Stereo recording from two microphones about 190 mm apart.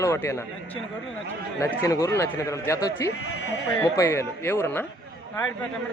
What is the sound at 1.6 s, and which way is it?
A man's voice, 15° left (ahead or behind).